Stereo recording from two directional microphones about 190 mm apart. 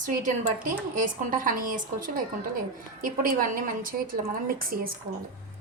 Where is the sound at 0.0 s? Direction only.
40° right (ahead or behind).